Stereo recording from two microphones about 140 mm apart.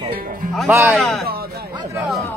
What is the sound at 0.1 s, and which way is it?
Music, 85° right.